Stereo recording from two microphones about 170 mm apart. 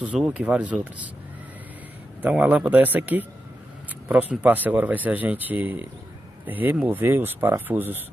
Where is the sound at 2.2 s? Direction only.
10° right (ahead or behind).